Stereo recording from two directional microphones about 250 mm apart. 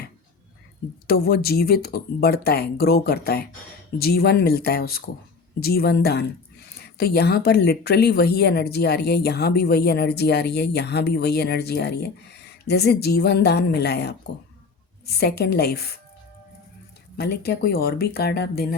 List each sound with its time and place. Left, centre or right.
1.0 s speech: left
17.2 s speech: left